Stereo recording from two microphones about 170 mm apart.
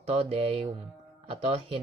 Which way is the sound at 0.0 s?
35° right (ahead or behind).